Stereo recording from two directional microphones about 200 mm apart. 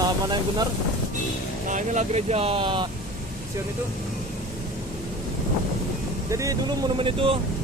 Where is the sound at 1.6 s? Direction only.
40° right (ahead or behind).